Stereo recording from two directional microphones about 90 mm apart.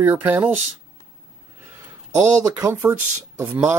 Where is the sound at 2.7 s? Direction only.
20° right (ahead or behind).